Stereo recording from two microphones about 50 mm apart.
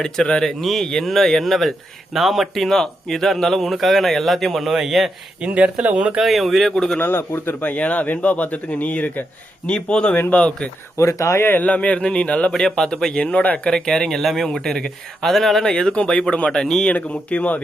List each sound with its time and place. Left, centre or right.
0.3 s a man's voice: centre
5.4 s speech: right
6.1 s a man's voice: centre
6.7 s speech: centre
7.0 s speech: left
7.6 s speech: left
9.6 s a man's voice: centre
10.2 s speech: left
10.9 s speech: left
11.6 s a man's voice: left; by 15.6 s centre
15.6 s a man's voice: centre
16.9 s a man's voice: left